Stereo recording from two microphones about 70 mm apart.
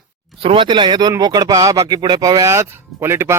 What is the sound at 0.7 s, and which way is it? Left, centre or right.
Speech, right.